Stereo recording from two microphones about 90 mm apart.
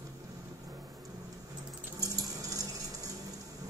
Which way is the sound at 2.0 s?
40° right (ahead or behind).